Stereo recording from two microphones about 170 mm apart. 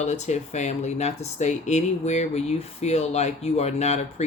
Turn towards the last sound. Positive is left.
turn(degrees=40)  # may be behind; listen again after turning